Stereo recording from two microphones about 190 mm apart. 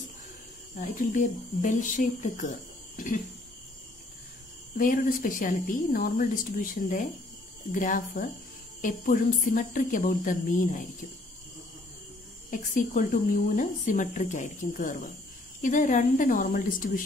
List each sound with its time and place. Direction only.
0.7 s speech: 40° left (ahead or behind)
4.7 s speech: 45° left (ahead or behind)
12.4 s speech: 45° left (ahead or behind)